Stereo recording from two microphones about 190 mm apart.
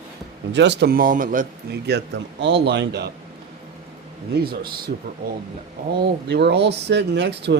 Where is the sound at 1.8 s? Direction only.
65° right (ahead or behind).